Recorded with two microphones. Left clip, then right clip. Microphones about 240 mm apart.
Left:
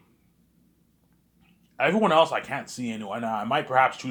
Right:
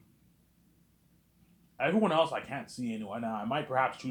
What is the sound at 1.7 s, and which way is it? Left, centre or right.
Speech, left.